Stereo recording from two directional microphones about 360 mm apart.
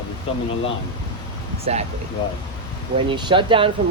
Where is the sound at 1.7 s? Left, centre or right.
Centre.